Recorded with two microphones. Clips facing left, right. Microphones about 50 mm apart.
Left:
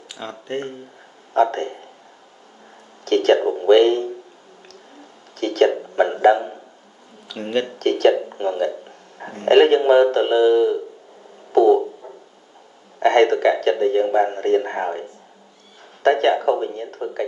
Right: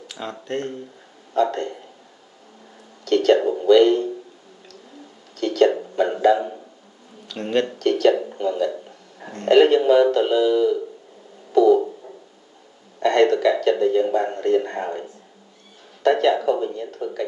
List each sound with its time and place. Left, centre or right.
0.1 s speech: centre
1.3 s a man's voice: left
3.1 s speech: left
3.3 s speech: left
3.7 s a man's voice: left
5.3 s a sound: left
7.2 s speech: centre
7.8 s a man's voice: left
8.1 s speech: centre
8.4 s a man's voice: left
11.5 s a sound: left
13.0 s a man's voice: left
16.0 s a man's voice: left